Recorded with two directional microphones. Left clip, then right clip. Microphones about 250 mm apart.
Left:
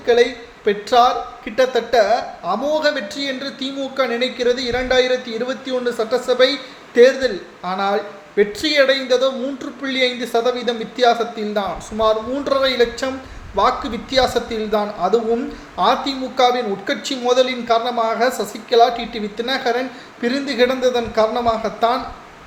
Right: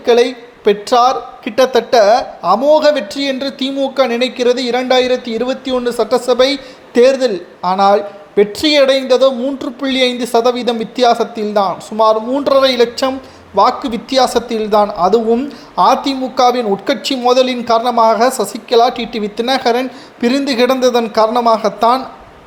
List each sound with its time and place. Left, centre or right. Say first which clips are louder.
0.0 s a woman's voice: right 4 dB; right